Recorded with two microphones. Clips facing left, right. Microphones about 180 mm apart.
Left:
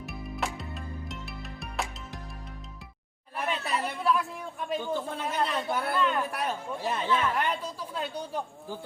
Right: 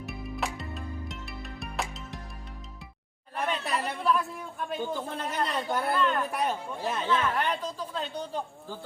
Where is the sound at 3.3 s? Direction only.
5° left (ahead or behind).